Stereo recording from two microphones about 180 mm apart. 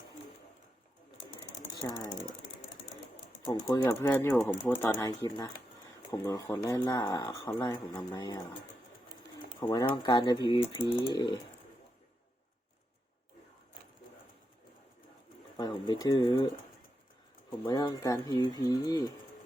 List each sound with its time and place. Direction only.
1.7 s speech: 20° left (ahead or behind)
3.4 s speech: 25° left (ahead or behind)
3.8 s speech: 10° left (ahead or behind)
4.9 s speech: 20° left (ahead or behind)
9.6 s speech: 25° left (ahead or behind)
15.5 s speech: 25° left (ahead or behind)
17.6 s speech: 25° left (ahead or behind)